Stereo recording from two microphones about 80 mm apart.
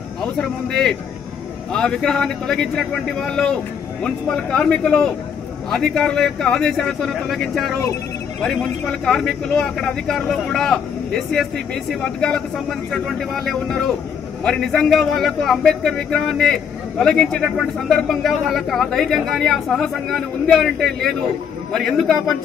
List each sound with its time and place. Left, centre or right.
0.2 s a man's voice: centre